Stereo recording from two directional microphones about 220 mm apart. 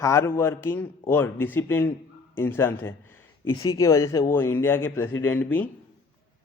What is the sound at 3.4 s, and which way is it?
Speech, 70° left (ahead or behind).